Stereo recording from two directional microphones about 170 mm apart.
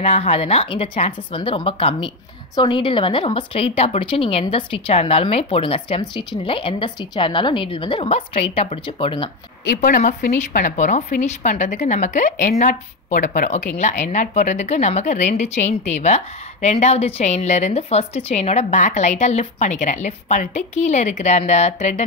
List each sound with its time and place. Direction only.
0.0 s a woman's voice: 40° left (ahead or behind)
9.8 s a woman's voice: 50° left (ahead or behind)